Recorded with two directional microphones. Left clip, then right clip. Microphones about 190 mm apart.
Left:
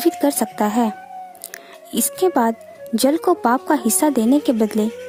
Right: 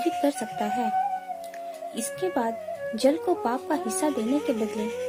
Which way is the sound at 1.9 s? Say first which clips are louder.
Left 11 dB; 55° left (ahead or behind).